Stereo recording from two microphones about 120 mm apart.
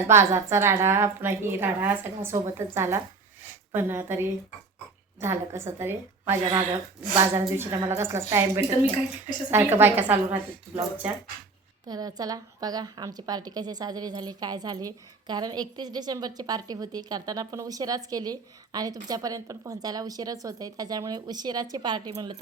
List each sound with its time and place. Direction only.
0.1 s a woman's voice: 20° right (ahead or behind)
11.9 s a woman's voice: 35° right (ahead or behind)